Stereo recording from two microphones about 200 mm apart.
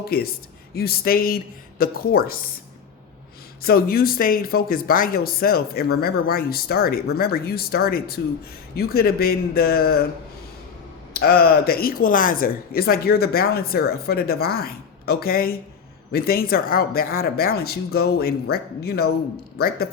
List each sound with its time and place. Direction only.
0.0 s speech: 50° left (ahead or behind)
3.6 s speech: 50° left (ahead or behind)
11.1 s speech: 50° left (ahead or behind)